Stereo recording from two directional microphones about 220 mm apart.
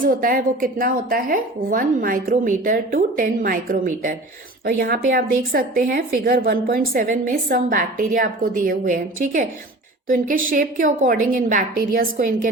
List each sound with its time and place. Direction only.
0.0 s speech: 40° right (ahead or behind)